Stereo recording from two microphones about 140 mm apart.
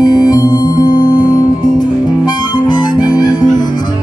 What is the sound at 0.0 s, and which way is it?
Music, 30° left (ahead or behind).